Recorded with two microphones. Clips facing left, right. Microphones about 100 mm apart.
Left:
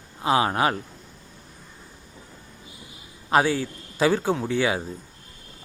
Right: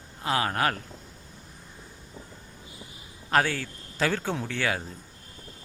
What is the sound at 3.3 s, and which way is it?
A man's voice, 15° left (ahead or behind).